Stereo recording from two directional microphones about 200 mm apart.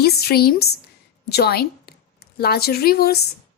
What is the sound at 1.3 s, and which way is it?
A woman's voice, 55° left (ahead or behind).